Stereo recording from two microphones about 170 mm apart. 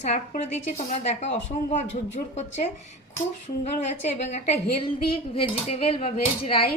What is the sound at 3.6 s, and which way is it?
Speech, 45° left (ahead or behind).